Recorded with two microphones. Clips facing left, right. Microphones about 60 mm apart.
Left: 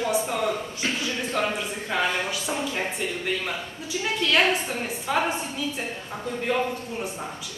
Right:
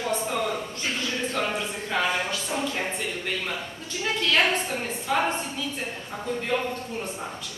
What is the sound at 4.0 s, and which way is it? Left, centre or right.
A woman's voice, centre.